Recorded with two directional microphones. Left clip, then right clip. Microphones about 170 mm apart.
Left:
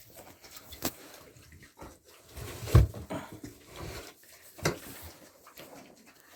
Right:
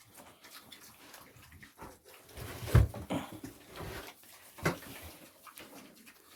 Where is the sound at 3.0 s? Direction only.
25° right (ahead or behind).